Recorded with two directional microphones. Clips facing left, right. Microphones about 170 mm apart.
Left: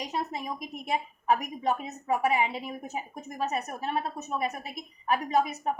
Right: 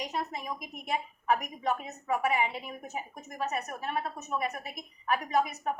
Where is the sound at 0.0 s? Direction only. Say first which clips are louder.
Left 2 dB; 30° left (ahead or behind).